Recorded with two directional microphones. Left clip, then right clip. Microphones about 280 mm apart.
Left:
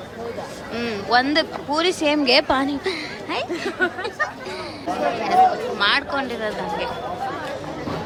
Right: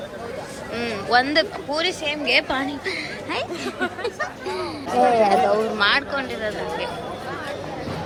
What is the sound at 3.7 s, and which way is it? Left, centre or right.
Speech, left.